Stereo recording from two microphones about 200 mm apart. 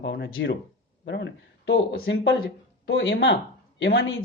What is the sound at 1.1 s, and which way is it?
Speech, 60° left (ahead or behind).